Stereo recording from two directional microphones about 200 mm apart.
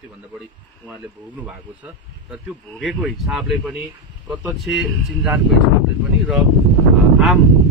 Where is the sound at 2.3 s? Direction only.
Centre (ahead or behind).